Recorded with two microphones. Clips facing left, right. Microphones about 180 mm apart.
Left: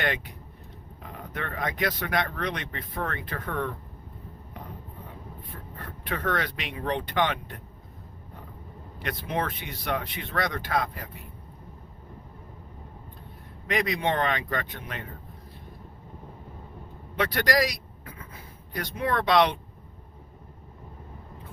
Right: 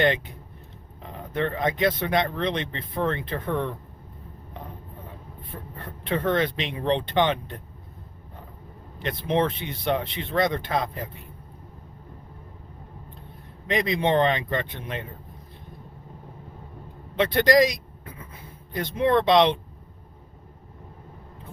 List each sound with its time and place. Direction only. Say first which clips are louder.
0.0 s speech: right 7 dB; 25° right (ahead or behind)
6.1 s speech: right 6 dB; 25° right (ahead or behind)
9.0 s speech: right 6 dB; 25° right (ahead or behind)
13.7 s speech: right 3 dB; 25° right (ahead or behind)
17.2 s speech: right 6 dB; 25° right (ahead or behind)